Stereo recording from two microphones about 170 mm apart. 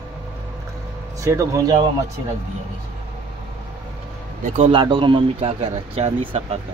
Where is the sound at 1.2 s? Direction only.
20° right (ahead or behind).